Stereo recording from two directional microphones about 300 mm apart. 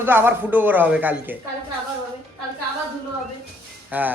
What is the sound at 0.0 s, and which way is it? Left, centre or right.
Speech, centre.